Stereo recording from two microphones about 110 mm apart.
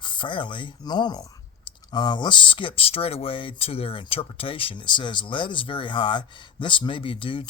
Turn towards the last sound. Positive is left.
turn(degrees=50)  # may be behind; listen again after turning